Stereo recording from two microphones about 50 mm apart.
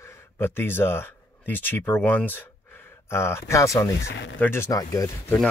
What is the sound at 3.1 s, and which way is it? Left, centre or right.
Speech, left.